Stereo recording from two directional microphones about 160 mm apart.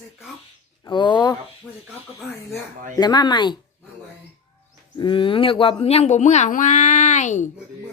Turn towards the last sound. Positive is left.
turn(degrees=50)  # may be behind; listen again after turning